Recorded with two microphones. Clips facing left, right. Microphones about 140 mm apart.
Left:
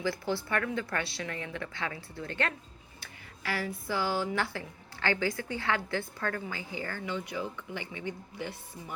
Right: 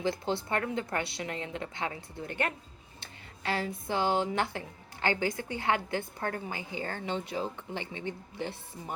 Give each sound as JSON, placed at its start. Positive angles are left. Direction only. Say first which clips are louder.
{"t": 0.0, "sound": "speech", "louder": "right 1 dB", "side_deg": -20}